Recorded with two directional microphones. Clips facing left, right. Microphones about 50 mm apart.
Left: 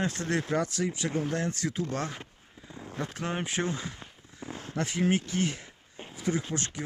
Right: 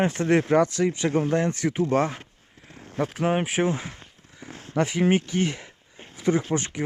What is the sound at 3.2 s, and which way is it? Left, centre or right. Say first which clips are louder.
Speech: right 10 dB; right.